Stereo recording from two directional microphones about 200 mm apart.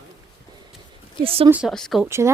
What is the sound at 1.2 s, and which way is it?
Speech, 30° right (ahead or behind).